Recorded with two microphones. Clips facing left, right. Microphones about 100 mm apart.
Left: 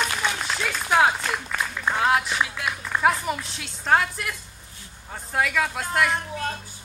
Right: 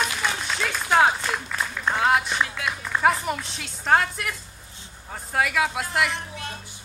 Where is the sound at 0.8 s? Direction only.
Centre (ahead or behind).